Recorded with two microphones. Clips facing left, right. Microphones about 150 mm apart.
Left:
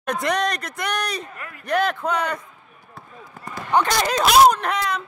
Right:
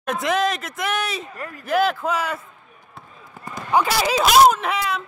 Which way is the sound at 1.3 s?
40° right (ahead or behind).